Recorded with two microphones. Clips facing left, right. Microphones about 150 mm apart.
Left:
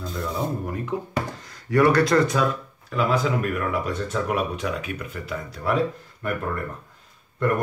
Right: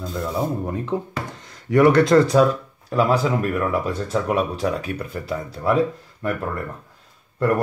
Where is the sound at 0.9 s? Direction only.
30° right (ahead or behind).